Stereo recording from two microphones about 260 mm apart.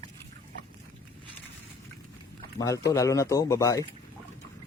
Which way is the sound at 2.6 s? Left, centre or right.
Centre.